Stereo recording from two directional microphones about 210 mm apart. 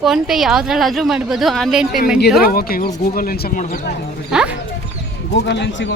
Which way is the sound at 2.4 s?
45° left (ahead or behind).